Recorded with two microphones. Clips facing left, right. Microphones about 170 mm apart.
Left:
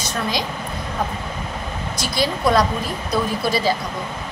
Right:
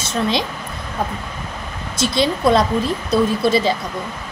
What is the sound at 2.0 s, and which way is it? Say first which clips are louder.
Speech: right 5 dB; 25° right (ahead or behind).